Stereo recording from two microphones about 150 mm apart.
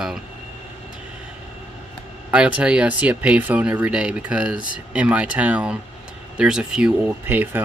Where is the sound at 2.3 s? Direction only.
5° right (ahead or behind).